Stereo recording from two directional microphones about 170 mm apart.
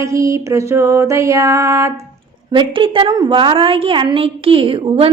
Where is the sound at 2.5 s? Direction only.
30° right (ahead or behind).